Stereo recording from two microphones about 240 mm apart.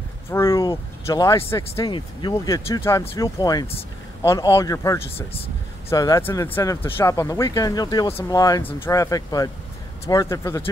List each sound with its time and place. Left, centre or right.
0.3 s speech: centre